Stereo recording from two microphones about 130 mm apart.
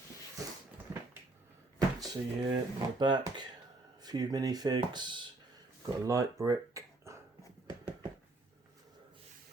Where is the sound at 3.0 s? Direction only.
35° right (ahead or behind).